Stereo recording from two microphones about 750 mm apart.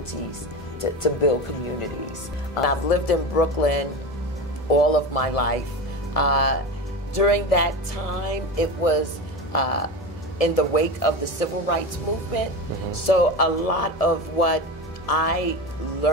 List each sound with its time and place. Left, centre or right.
2.5 s music: left
12.9 s music: left